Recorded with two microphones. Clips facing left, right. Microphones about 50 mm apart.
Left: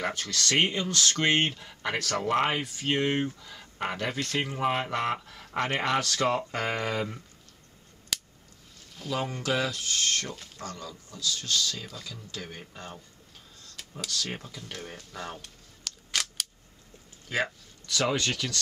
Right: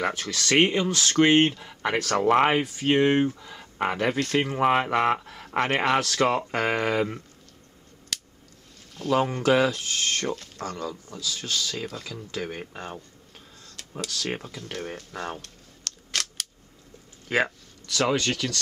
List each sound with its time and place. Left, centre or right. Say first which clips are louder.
0.0 s speech: right 3 dB; centre
0.8 s speech: right 6 dB; centre
5.9 s speech: right 4 dB; centre
6.2 s speech: right 4 dB; right
8.1 s scissors: even; centre
9.1 s speech: right 8 dB; right
14.0 s speech: right 2 dB; centre
14.3 s speech: right 6 dB; right
15.4 s scissors: right 2 dB; centre
17.3 s speech: right 5 dB; right
18.1 s speech: right 4 dB; centre